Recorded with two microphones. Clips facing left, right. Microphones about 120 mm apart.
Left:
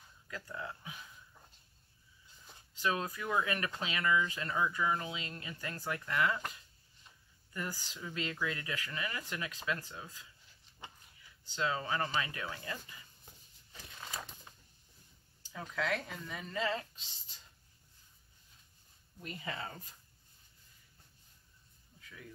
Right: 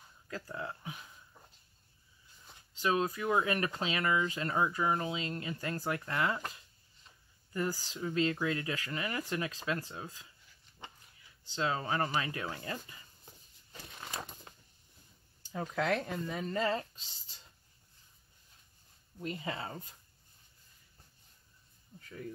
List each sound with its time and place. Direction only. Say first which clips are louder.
0.3 s speech: right 3 dB; 30° right (ahead or behind)
2.7 s speech: right 4 dB; 30° right (ahead or behind)
7.5 s speech: right 7 dB; 30° right (ahead or behind)
11.4 s speech: right 2 dB; 25° right (ahead or behind)
13.8 s a sound: right 2 dB; 25° right (ahead or behind)
15.8 s speech: right 4 dB; 60° right (ahead or behind)
16.5 s speech: right 3 dB; 30° right (ahead or behind)
19.1 s speech: right 4 dB; 25° right (ahead or behind)